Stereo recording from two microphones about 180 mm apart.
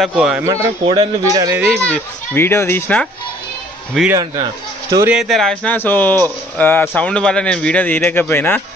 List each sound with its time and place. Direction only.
0.0 s speech: 5° right (ahead or behind)
0.8 s speech: 25° right (ahead or behind)
1.6 s speech: centre (ahead or behind)
2.3 s a man's voice: 15° left (ahead or behind)
4.8 s speech: 15° right (ahead or behind)
5.1 s a man's voice: centre (ahead or behind)